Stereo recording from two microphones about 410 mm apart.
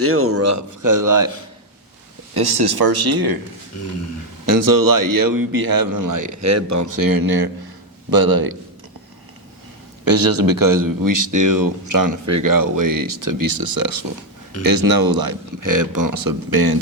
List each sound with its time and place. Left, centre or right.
0.0 s speech: right
2.3 s speech: right
3.8 s a sound: left
4.4 s speech: right
10.0 s speech: right